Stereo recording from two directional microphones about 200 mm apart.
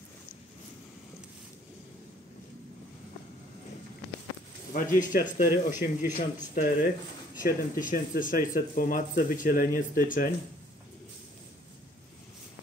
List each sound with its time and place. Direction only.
4.7 s speech: 40° left (ahead or behind)